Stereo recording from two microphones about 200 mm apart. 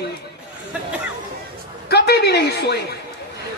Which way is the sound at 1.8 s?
55° left (ahead or behind).